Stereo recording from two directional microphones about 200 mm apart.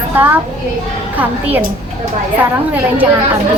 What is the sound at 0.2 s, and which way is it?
A woman's voice, 10° right (ahead or behind).